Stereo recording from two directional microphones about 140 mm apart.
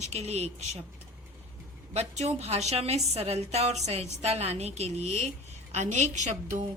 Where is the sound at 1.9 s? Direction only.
50° right (ahead or behind).